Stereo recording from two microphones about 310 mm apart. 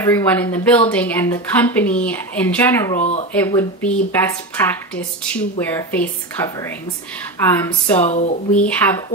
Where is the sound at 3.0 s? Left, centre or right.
Left.